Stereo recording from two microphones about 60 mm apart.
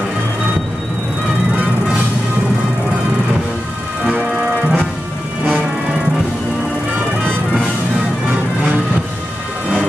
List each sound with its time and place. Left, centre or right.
4.1 s music: right